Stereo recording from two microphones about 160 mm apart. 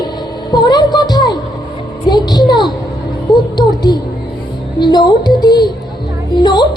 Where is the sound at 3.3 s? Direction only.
Centre (ahead or behind).